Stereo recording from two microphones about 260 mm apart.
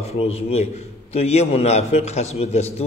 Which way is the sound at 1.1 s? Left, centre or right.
Left.